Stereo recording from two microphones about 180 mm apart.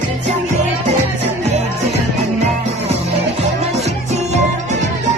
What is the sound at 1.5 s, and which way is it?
Music, 40° right (ahead or behind).